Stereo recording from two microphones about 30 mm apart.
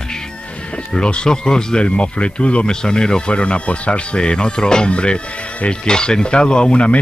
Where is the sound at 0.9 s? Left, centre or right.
Left.